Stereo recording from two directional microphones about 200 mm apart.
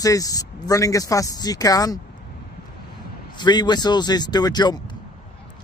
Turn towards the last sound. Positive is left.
turn(degrees=20)  # may be behind; listen again after turning